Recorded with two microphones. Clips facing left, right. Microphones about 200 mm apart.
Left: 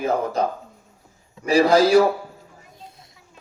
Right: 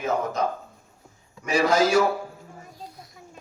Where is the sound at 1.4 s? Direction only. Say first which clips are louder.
Left 5 dB; 35° left (ahead or behind).